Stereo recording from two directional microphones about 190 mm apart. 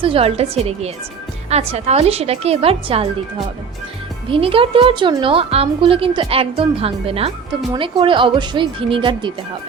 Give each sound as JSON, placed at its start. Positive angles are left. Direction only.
{"t": 0.0, "sound": "speech", "side_deg": -30}
{"t": 4.3, "sound": "a woman's voice", "side_deg": -30}